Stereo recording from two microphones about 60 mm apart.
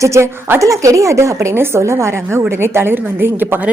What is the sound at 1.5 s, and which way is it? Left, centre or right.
A woman's voice, right.